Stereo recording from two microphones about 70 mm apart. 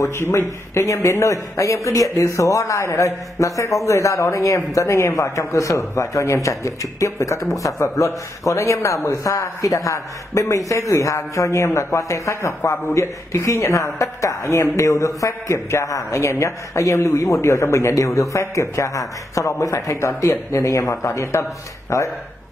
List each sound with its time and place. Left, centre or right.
0.0 s a man's voice: left